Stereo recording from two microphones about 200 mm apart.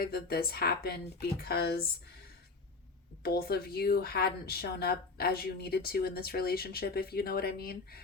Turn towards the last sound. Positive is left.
turn(degrees=50)  # may be behind; listen again after turning